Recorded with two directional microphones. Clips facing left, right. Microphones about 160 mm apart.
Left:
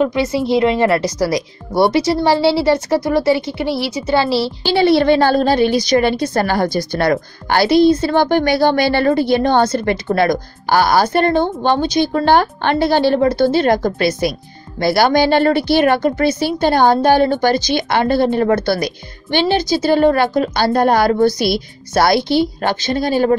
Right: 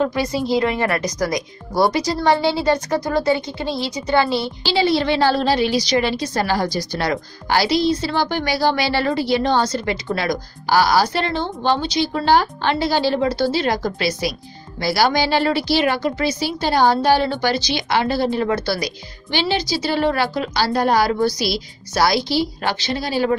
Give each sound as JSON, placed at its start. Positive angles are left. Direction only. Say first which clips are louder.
{"t": 0.0, "sound": "a woman's voice", "louder": "left 4 dB", "side_deg": 20}
{"t": 3.4, "sound": "a woman's voice", "louder": "left 5 dB", "side_deg": -20}
{"t": 4.1, "sound": "a woman's voice", "louder": "left 3 dB", "side_deg": 25}
{"t": 4.6, "sound": "a woman's voice", "louder": "left 6 dB", "side_deg": 55}